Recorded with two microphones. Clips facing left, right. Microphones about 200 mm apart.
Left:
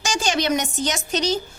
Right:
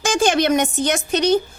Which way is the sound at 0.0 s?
55° right (ahead or behind).